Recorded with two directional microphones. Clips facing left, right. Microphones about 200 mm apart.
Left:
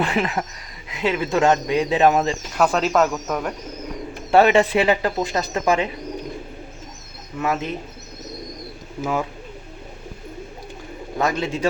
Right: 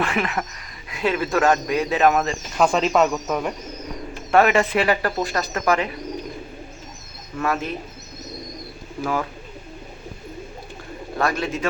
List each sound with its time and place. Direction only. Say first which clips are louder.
0.0 s speech: left 2 dB; 30° left (ahead or behind)
1.0 s speech: left 1 dB; 15° left (ahead or behind)
2.6 s speech: right 1 dB; 5° left (ahead or behind)
4.3 s speech: left 2 dB; 30° left (ahead or behind)
7.3 s speech: left 1 dB; 20° left (ahead or behind)
9.0 s speech: left 1 dB; 20° left (ahead or behind)
11.2 s speech: left 2 dB; 20° left (ahead or behind)